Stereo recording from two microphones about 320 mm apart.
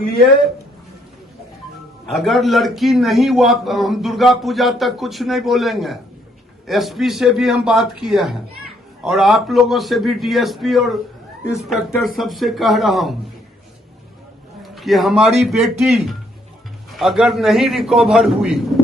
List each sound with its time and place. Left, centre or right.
2.0 s a man's voice: centre
14.6 s a man's voice: centre